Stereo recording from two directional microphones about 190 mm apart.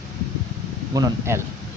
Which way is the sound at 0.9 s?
15° right (ahead or behind).